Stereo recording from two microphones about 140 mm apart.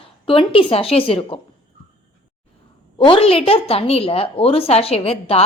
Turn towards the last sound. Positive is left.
turn(degrees=45)  # may be behind; listen again after turning